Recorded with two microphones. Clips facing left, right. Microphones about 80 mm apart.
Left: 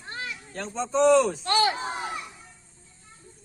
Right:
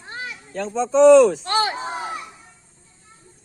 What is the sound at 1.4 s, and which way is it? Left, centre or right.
Speech, right.